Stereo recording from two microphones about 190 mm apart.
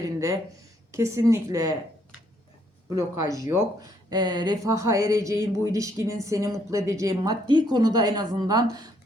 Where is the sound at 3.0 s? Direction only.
15° right (ahead or behind).